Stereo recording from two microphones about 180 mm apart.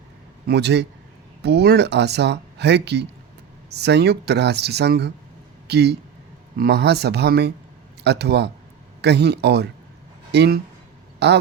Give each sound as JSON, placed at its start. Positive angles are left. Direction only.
{"t": 0.4, "sound": "speech", "side_deg": -70}